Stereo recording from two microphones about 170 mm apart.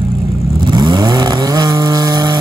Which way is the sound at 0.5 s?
25° right (ahead or behind).